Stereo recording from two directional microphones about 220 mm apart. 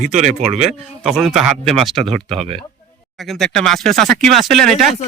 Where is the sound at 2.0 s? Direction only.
25° right (ahead or behind).